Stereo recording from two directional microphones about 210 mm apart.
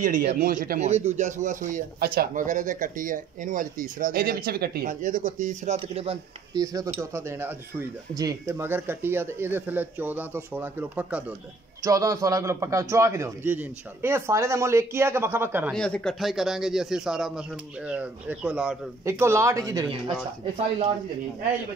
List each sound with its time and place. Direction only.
0.0 s speech: 45° right (ahead or behind)
6.5 s a man's voice: 15° right (ahead or behind)
15.7 s speech: 5° left (ahead or behind); by 20.0 s 20° right (ahead or behind)